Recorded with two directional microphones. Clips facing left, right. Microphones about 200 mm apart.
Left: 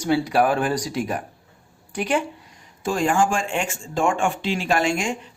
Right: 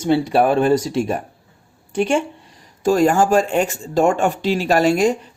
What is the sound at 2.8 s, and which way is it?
Speech, 40° right (ahead or behind).